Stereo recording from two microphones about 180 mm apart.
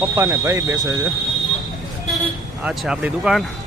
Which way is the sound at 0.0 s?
15° right (ahead or behind).